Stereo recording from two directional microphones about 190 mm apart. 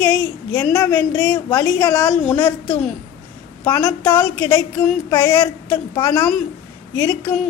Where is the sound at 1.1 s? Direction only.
5° left (ahead or behind).